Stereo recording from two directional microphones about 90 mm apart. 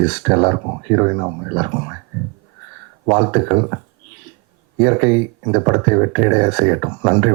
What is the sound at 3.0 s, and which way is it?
A woman's voice, 20° right (ahead or behind).